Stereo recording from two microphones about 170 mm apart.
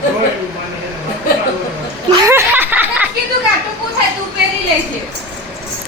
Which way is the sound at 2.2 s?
10° right (ahead or behind).